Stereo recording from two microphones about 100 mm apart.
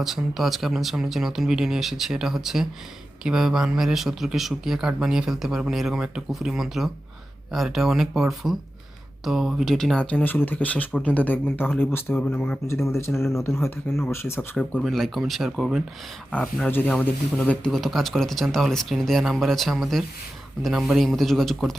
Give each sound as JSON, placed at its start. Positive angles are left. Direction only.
{"t": 0.0, "sound": "speech", "side_deg": -5}
{"t": 12.9, "sound": "speech", "side_deg": 25}
{"t": 14.5, "sound": "speech", "side_deg": 10}
{"t": 16.6, "sound": "speech", "side_deg": 20}